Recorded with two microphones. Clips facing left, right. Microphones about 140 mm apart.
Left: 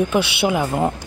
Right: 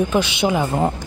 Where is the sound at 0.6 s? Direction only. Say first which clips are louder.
Even; 5° right (ahead or behind).